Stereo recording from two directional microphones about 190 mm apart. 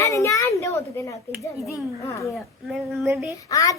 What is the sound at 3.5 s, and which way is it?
Speech, 15° left (ahead or behind).